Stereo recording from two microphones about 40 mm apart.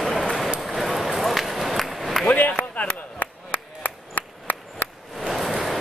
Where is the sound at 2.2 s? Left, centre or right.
Left.